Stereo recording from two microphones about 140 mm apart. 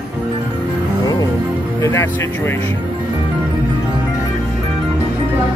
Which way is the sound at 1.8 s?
20° left (ahead or behind).